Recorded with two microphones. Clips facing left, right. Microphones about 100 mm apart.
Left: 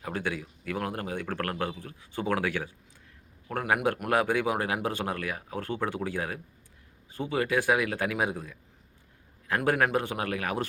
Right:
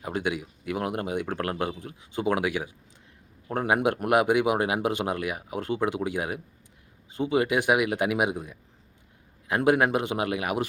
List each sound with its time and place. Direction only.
0.0 s speech: 15° right (ahead or behind)
3.5 s a man's voice: 25° right (ahead or behind)